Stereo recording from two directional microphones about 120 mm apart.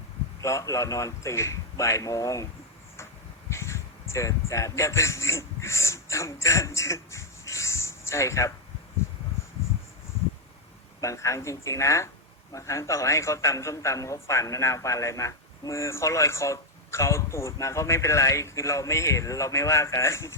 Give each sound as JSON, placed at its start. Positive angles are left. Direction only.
{"t": 0.4, "sound": "a man's voice", "side_deg": 25}
{"t": 3.5, "sound": "a sound", "side_deg": 25}
{"t": 4.1, "sound": "speech", "side_deg": 25}
{"t": 11.0, "sound": "a man's voice", "side_deg": 25}